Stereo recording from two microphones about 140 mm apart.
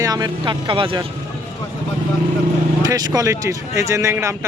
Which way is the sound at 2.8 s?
30° right (ahead or behind).